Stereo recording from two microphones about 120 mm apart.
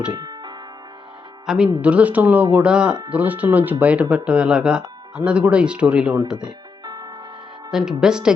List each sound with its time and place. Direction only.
0.1 s music: 35° right (ahead or behind)
1.5 s speech: 5° right (ahead or behind)
6.8 s music: 35° right (ahead or behind)
7.7 s speech: 5° right (ahead or behind)